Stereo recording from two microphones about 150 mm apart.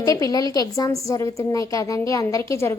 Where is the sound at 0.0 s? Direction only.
25° left (ahead or behind).